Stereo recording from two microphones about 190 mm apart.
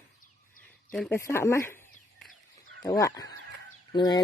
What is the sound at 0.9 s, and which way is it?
Speech, 5° left (ahead or behind).